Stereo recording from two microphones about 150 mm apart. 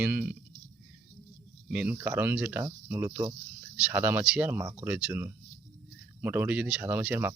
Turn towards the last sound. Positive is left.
turn(degrees=-10)  # may be behind; listen again after turning